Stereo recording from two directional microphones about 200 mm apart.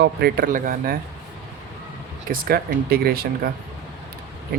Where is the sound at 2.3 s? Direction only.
50° right (ahead or behind).